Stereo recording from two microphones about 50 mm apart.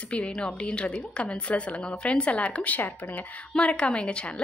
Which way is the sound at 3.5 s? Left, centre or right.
Left.